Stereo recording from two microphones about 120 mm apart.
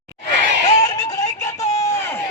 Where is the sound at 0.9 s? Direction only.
30° left (ahead or behind).